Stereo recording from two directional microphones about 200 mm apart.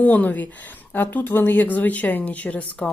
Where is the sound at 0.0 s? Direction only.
10° left (ahead or behind).